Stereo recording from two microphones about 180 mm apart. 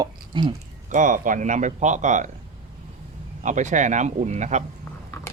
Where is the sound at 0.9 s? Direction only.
45° right (ahead or behind).